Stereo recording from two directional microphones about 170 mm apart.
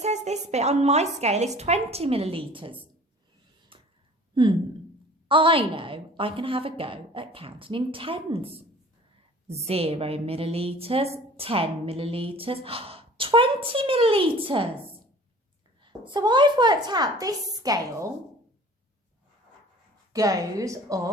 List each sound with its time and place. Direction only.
0.0 s a woman's voice: 40° right (ahead or behind)
3.7 s a sound: 30° right (ahead or behind)
5.3 s a woman's voice: 30° right (ahead or behind)
15.8 s speech: 25° right (ahead or behind)
20.1 s speech: 20° right (ahead or behind)